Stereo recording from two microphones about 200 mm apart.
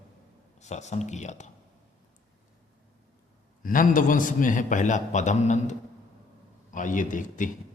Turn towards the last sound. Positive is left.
turn(degrees=40)  # may be behind; listen again after turning